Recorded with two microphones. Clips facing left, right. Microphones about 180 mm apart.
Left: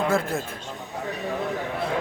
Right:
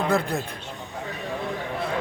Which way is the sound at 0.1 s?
Centre (ahead or behind).